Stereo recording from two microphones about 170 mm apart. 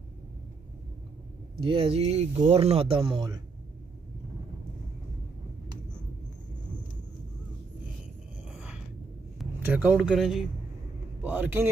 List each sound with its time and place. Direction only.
1.6 s speech: 30° right (ahead or behind)
8.5 s a sound: 5° right (ahead or behind)
9.7 s speech: 10° right (ahead or behind)